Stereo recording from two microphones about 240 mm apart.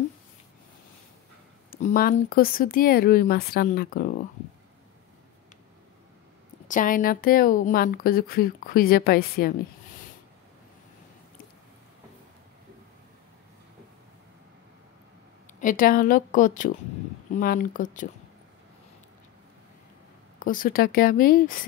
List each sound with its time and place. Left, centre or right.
1.7 s speech: left
6.7 s speech: left
15.6 s speech: left
20.3 s speech: left